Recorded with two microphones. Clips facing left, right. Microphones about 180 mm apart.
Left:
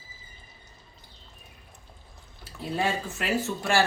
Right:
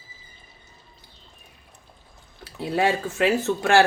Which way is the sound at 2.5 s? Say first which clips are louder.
Right 6 dB; 80° right.